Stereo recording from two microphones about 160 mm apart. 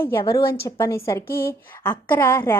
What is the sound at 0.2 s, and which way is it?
A woman's voice, 20° left (ahead or behind).